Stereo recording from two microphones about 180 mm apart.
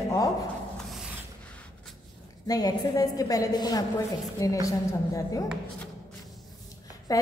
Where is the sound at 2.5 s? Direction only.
20° left (ahead or behind).